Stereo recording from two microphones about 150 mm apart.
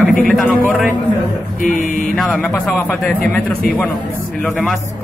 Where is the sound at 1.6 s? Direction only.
60° left (ahead or behind).